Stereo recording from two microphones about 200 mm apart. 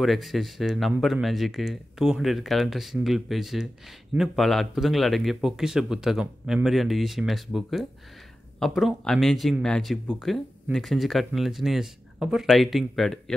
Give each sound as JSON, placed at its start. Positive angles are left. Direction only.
{"t": 0.0, "sound": "speech", "side_deg": 0}